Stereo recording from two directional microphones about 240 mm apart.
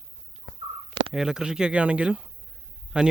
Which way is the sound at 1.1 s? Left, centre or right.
Centre.